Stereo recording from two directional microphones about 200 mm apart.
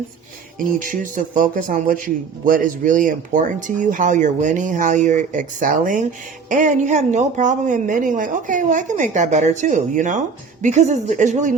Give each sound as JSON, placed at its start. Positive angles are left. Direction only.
{"t": 0.6, "sound": "speech", "side_deg": -45}